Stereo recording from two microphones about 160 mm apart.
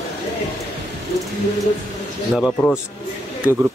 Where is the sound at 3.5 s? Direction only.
20° left (ahead or behind).